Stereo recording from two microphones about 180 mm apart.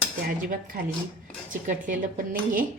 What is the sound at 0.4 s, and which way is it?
Speech, 50° right (ahead or behind).